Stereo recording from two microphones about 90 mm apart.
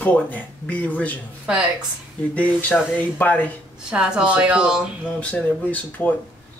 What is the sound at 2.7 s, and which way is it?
Speech, 10° left (ahead or behind).